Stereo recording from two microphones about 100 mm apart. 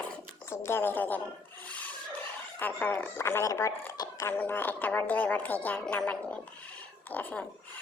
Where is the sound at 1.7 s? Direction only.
15° left (ahead or behind).